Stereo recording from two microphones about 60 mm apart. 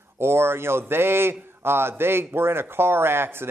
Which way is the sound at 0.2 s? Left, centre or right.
Right.